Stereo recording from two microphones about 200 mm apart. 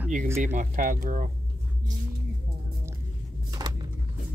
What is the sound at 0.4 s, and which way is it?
Speech, 40° right (ahead or behind).